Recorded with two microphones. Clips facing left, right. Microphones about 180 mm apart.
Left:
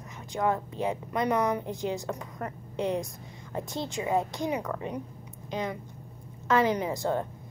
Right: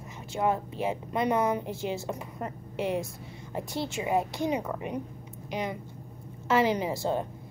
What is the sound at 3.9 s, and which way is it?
A woman's voice, 20° right (ahead or behind).